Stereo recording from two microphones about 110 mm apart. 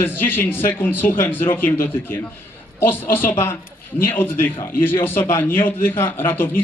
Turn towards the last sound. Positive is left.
turn(degrees=20)  # may be behind; listen again after turning